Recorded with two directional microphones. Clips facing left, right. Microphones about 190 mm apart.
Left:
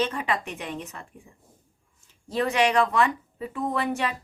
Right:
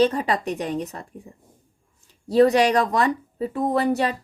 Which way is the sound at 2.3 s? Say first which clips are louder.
Right 7 dB; 35° right (ahead or behind).